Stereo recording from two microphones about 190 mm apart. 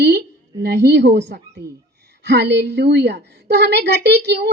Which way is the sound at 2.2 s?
60° right (ahead or behind).